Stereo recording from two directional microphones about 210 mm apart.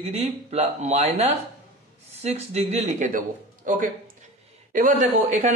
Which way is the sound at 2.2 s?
30° right (ahead or behind).